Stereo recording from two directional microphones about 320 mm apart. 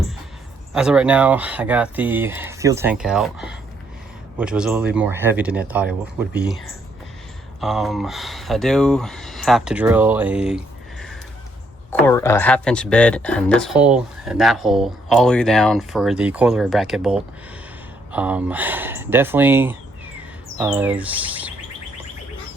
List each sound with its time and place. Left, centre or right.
0.7 s speech: centre
7.6 s speech: centre
11.9 s speech: centre
20.6 s bird: centre